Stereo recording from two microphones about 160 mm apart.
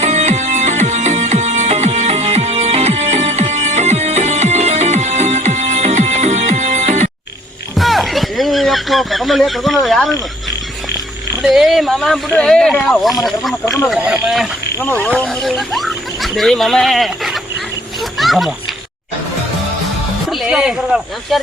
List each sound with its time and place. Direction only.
0.0 s music: 45° right (ahead or behind)
7.8 s a sound: centre (ahead or behind)
9.8 s speech: centre (ahead or behind)
11.4 s speech: centre (ahead or behind)
13.7 s speech: 20° left (ahead or behind)
13.9 s speech: 5° right (ahead or behind)
14.8 s speech: 10° left (ahead or behind)
18.2 s a sound: centre (ahead or behind)
20.3 s speech: 5° right (ahead or behind)